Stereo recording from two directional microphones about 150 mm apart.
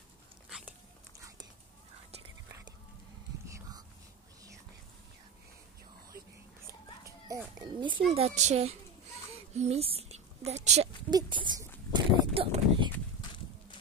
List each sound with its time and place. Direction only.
0.5 s biting: 5° right (ahead or behind)
7.1 s children playing: 20° right (ahead or behind)
8.1 s speech: 45° right (ahead or behind)
9.3 s a sound: 45° right (ahead or behind)
11.1 s speech: 30° right (ahead or behind)